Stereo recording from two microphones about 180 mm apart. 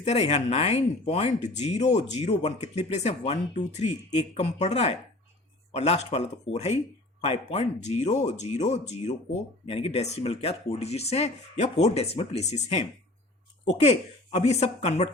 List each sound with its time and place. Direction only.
0.0 s speech: 35° left (ahead or behind)
13.8 s speech: 40° left (ahead or behind)